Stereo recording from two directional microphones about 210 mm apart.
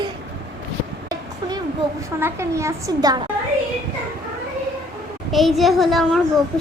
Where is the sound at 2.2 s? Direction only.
15° right (ahead or behind).